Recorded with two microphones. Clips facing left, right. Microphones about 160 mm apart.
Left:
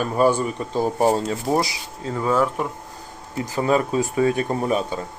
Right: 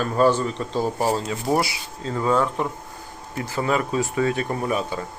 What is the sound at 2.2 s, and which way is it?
Speech, 5° left (ahead or behind).